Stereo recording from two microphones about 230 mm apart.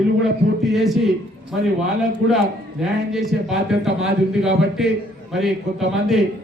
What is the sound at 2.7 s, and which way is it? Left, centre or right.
A man's voice, centre.